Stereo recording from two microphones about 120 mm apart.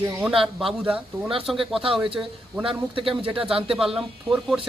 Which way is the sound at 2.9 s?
50° right (ahead or behind).